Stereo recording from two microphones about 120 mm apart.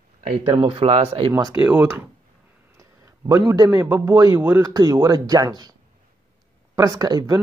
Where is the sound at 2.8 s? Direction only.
25° right (ahead or behind).